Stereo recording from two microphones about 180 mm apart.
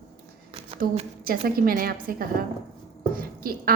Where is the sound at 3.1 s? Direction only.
55° right (ahead or behind).